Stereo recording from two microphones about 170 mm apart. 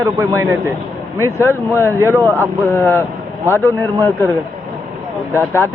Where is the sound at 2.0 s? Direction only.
15° right (ahead or behind).